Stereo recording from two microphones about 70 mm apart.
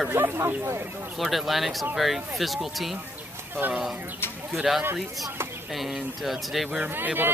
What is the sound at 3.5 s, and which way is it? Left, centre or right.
Speech, right.